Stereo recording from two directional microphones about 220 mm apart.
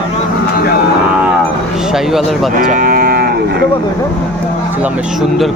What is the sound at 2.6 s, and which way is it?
Cattle, 40° right (ahead or behind).